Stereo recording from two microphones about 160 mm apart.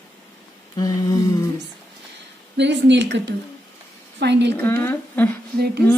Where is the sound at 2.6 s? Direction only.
90° right.